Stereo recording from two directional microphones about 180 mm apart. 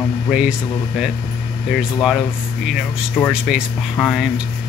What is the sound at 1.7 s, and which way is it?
Speech, centre (ahead or behind).